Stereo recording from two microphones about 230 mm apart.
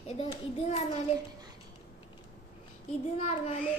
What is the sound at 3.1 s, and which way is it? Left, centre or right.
Speech, left.